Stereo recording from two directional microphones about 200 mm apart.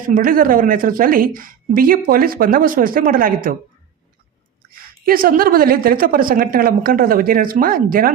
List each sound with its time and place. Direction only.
0.1 s a woman's voice: 45° right (ahead or behind)
4.7 s a woman's voice: 45° right (ahead or behind)